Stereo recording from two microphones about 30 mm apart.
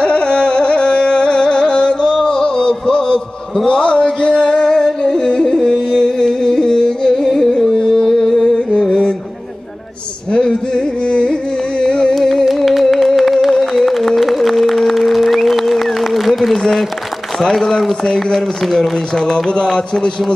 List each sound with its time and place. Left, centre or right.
0.0 s carnatic music: left
2.1 s music: left
7.2 s carnatic music: centre
7.7 s carnatic music: left
8.1 s a sound: centre
10.3 s music: left
11.8 s music: centre
12.4 s music: centre
12.8 s a sound: centre
13.5 s music: centre
17.4 s a man's voice: centre
19.2 s speech: left